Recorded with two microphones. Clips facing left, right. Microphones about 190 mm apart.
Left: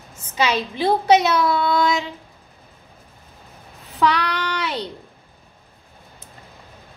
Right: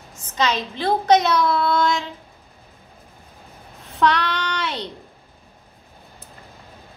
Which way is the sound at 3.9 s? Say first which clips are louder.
Even; 5° left (ahead or behind).